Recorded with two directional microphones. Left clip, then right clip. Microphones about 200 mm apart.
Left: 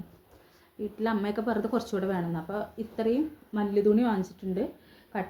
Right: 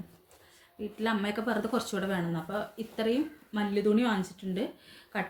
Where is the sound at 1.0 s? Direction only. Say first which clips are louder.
Left 1 dB; 25° right (ahead or behind).